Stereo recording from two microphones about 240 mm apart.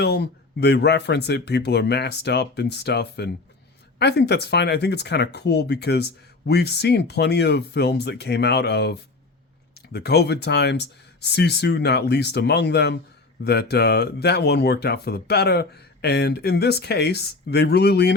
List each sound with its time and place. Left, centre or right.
0.0 s speech: left